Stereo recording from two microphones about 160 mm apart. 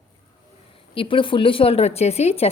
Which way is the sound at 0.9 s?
30° left (ahead or behind).